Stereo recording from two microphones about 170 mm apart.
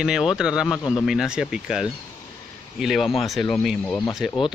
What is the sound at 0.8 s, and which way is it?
Speech, 15° left (ahead or behind).